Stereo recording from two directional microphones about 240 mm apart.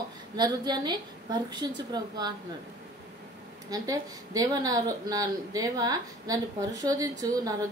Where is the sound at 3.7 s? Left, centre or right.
Centre.